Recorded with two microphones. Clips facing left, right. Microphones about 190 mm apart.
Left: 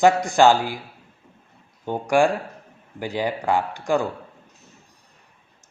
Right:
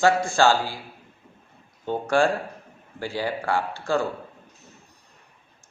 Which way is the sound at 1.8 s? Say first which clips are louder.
Left 2 dB; 15° left (ahead or behind).